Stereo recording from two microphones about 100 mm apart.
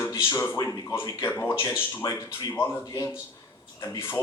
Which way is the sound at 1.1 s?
30° left (ahead or behind).